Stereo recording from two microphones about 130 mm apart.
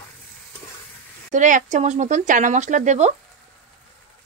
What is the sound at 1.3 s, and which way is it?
Speech, 75° right (ahead or behind).